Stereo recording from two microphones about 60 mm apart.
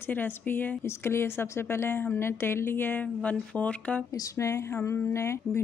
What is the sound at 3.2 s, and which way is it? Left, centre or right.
Speech, left.